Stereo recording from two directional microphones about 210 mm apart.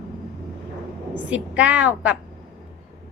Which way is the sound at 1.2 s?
5° right (ahead or behind).